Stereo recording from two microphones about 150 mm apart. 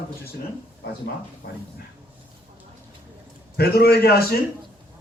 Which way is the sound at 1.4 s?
65° left (ahead or behind).